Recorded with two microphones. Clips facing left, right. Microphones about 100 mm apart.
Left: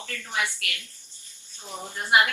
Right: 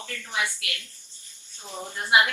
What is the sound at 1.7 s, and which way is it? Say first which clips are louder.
Speech: right 1 dB; 15° left (ahead or behind).